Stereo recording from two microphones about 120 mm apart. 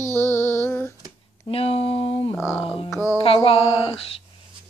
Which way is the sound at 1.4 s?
50° left (ahead or behind).